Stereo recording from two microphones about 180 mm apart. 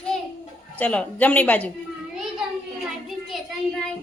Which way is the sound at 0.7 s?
10° left (ahead or behind).